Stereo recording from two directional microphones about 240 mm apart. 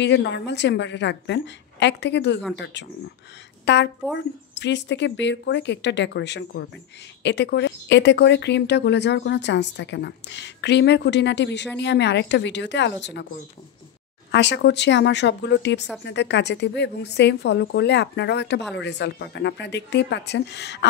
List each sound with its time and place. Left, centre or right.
0.0 s a woman's voice: left
14.3 s speech: left